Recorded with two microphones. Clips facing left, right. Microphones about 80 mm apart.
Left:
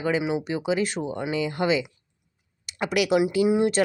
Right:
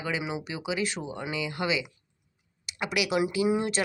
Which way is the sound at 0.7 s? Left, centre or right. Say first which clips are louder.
Left 5 dB; left.